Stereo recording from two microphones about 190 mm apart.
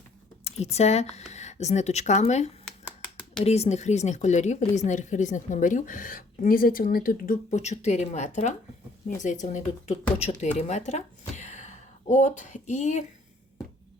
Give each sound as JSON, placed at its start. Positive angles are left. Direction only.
{"t": 0.4, "sound": "a woman's voice", "side_deg": 35}